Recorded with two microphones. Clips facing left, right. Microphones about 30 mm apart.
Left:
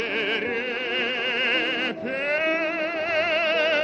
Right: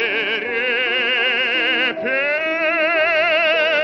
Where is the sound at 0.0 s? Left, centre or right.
Right.